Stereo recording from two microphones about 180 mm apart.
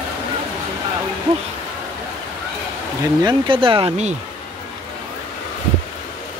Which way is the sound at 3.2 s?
25° right (ahead or behind).